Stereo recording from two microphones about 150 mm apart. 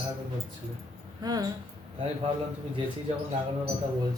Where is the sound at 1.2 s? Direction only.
25° right (ahead or behind).